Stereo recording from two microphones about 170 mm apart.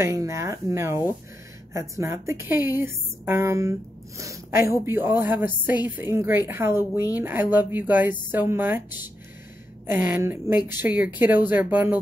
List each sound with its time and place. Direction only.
0.0 s a woman's voice: 20° right (ahead or behind)